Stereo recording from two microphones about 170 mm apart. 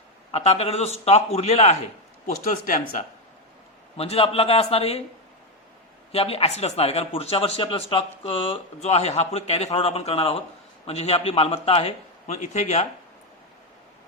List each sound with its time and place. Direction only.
0.3 s a man's voice: 35° left (ahead or behind)
3.9 s a man's voice: 35° left (ahead or behind)
6.1 s a man's voice: 35° left (ahead or behind)